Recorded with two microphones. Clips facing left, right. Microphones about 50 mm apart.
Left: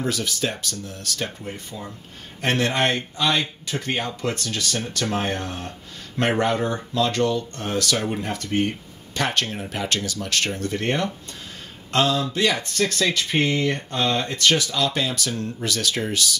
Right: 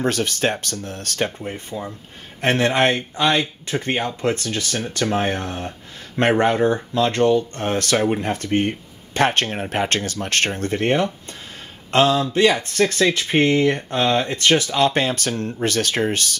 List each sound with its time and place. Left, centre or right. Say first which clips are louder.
0.0 s speech: right 5 dB; right
1.4 s a man's voice: right 5 dB; right
3.6 s speech: right 4 dB; right
5.2 s a man's voice: right 3 dB; centre
6.1 s speech: right 4 dB; right
10.8 s speech: right 7 dB; right
14.3 s speech: right 3 dB; right